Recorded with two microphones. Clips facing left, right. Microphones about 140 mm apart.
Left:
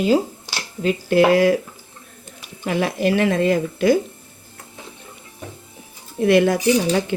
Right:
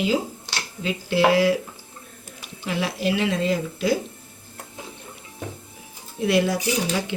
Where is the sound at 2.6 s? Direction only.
50° left (ahead or behind).